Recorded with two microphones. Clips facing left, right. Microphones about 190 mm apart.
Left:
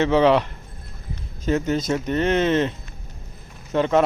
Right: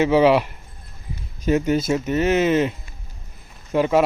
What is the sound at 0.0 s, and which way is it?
Speech, 10° right (ahead or behind).